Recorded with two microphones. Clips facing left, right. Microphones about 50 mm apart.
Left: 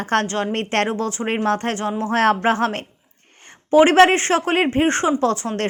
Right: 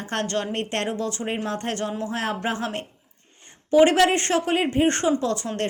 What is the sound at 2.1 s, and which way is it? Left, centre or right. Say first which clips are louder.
Speech: left 9 dB; left.